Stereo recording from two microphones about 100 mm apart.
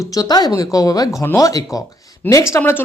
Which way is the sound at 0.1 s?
40° left (ahead or behind).